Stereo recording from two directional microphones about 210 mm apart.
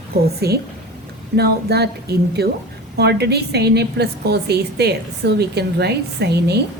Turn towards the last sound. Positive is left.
turn(degrees=-50)  # may be behind; listen again after turning